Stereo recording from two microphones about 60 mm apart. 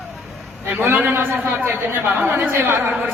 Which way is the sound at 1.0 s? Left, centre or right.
Right.